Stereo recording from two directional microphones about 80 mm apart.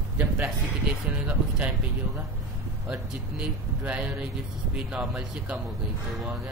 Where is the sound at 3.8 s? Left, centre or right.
Centre.